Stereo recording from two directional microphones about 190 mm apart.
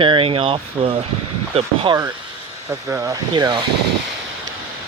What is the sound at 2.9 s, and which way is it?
Speech, 15° right (ahead or behind).